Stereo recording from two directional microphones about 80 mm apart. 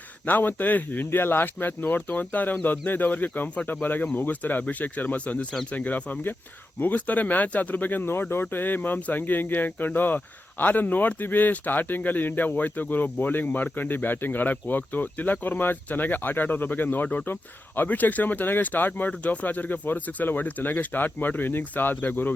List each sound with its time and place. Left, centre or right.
0.3 s speech: left